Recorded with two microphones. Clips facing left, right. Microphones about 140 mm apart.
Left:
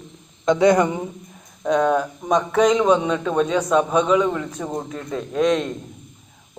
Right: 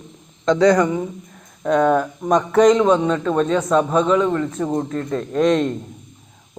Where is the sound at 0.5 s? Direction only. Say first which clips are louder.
Right 2 dB; 20° left (ahead or behind).